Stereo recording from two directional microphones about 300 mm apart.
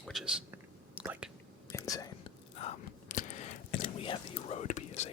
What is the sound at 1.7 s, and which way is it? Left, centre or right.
Whispering, centre.